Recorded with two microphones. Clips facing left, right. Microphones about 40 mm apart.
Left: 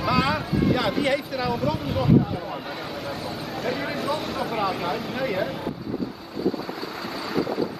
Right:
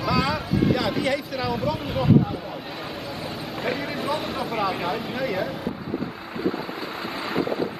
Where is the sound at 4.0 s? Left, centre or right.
Right.